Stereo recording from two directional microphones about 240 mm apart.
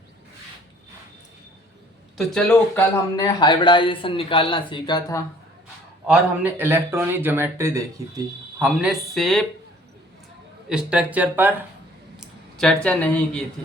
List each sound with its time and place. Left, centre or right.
2.1 s speech: centre
6.1 s speech: centre
10.7 s speech: centre